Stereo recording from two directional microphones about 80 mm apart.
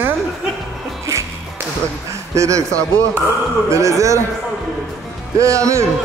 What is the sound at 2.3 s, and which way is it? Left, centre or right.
A man's voice, right.